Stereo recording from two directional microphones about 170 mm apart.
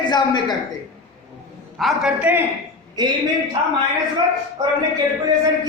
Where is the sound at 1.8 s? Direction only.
Centre (ahead or behind).